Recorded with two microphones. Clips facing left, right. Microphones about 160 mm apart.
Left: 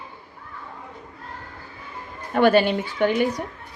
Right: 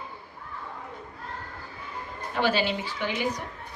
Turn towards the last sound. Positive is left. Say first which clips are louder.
# left 10 dB
turn(degrees=55)  # may be behind; listen again after turning